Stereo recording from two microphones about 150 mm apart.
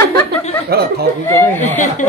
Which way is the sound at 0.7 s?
90° right.